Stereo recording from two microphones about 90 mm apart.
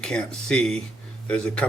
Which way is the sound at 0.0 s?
10° left (ahead or behind).